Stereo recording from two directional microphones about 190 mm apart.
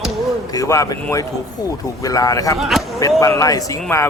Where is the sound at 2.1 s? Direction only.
20° left (ahead or behind).